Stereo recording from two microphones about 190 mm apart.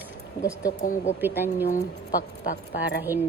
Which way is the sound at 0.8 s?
45° left (ahead or behind).